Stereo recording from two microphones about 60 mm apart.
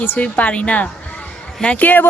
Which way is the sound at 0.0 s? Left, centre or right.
Left.